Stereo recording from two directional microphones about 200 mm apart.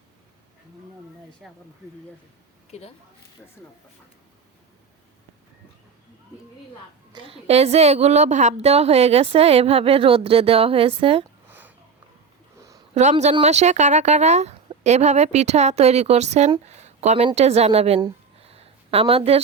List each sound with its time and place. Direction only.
1.4 s speech: centre (ahead or behind)
2.6 s speech: 30° left (ahead or behind)
7.1 s a woman's voice: 25° right (ahead or behind)
11.4 s sniff: 10° right (ahead or behind)
12.9 s speech: 35° right (ahead or behind)
18.0 s a sound: 30° right (ahead or behind)